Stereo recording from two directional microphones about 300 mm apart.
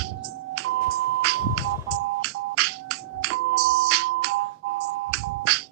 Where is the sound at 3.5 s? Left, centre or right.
Right.